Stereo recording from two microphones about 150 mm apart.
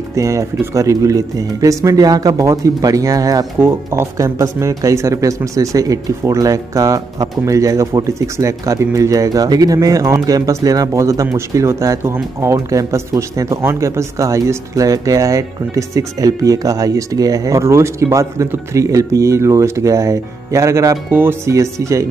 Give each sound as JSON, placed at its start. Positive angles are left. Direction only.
{"t": 0.1, "sound": "speech", "side_deg": -20}